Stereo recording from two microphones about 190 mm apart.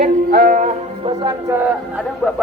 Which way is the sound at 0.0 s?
45° right (ahead or behind).